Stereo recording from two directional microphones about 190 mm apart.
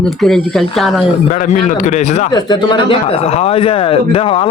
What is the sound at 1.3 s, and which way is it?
Speech, 45° left (ahead or behind).